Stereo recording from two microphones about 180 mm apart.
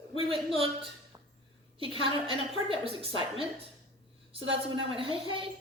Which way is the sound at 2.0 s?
30° right (ahead or behind).